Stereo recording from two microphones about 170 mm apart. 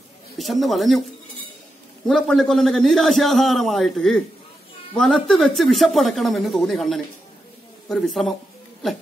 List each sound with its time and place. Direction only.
0.4 s a man's voice: centre (ahead or behind)
2.0 s a man's voice: centre (ahead or behind)